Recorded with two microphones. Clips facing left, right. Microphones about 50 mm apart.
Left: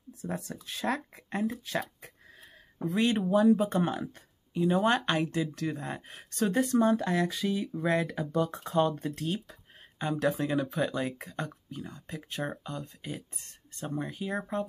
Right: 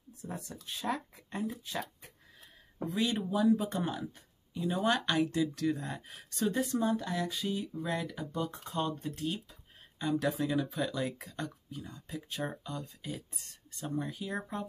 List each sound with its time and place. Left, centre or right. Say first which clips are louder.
0.5 s speech: left 2 dB; left
2.9 s speech: left 6 dB; left
4.6 s speech: left 5 dB; left
7.2 s speech: left 4 dB; left
9.1 s speech: left 3 dB; left
9.9 s speech: left 2 dB; left